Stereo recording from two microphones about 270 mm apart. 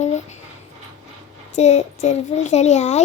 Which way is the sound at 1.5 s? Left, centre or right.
Left.